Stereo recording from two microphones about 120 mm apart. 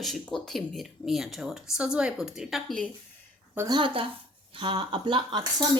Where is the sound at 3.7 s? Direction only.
45° right (ahead or behind).